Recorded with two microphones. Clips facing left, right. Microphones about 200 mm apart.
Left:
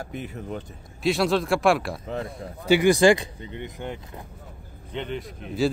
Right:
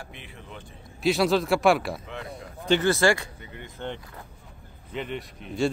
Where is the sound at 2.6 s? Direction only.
10° left (ahead or behind).